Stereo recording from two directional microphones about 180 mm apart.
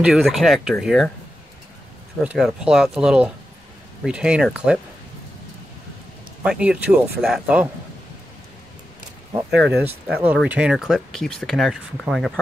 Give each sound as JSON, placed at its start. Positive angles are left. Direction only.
{"t": 0.0, "sound": "speech", "side_deg": 0}
{"t": 2.2, "sound": "speech", "side_deg": -5}
{"t": 6.4, "sound": "speech", "side_deg": -5}
{"t": 9.5, "sound": "speech", "side_deg": -70}
{"t": 10.0, "sound": "speech", "side_deg": -5}